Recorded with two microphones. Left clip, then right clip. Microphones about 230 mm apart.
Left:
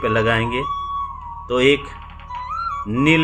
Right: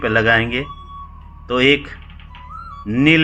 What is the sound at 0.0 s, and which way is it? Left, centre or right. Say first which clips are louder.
Speech: right 3 dB; centre.